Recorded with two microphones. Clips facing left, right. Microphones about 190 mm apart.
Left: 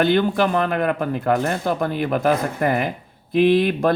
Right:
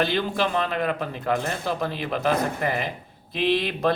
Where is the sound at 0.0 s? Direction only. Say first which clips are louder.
Left 6 dB; 55° left (ahead or behind).